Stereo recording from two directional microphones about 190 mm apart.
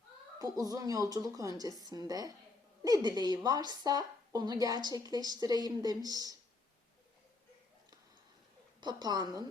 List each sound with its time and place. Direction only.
0.3 s speech: 20° right (ahead or behind)
8.8 s speech: 20° right (ahead or behind)